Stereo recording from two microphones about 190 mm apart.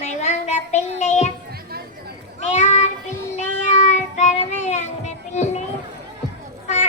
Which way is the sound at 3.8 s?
40° left (ahead or behind).